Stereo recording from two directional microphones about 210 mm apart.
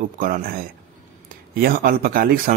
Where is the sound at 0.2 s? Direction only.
45° right (ahead or behind).